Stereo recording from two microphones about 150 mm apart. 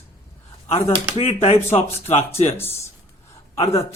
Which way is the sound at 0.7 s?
45° left (ahead or behind).